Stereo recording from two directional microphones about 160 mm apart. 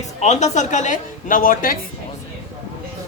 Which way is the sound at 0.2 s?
45° left (ahead or behind).